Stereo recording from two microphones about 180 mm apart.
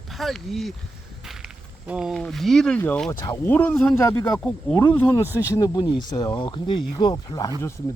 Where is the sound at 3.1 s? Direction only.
20° left (ahead or behind).